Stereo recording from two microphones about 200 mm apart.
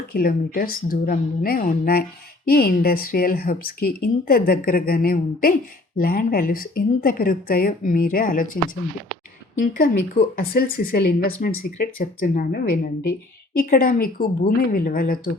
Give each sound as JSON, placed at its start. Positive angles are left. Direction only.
{"t": 0.1, "sound": "speech", "side_deg": 45}
{"t": 9.6, "sound": "speech", "side_deg": 45}